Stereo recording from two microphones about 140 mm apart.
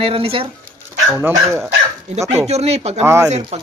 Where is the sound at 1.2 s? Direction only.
15° right (ahead or behind).